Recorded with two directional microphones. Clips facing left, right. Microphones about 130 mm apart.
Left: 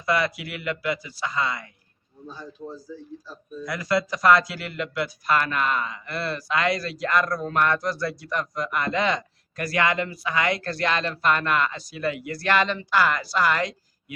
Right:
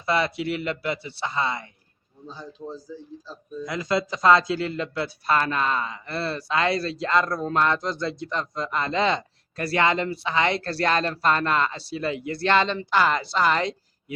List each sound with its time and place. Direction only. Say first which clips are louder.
0.0 s speech: right 1 dB; 25° right (ahead or behind)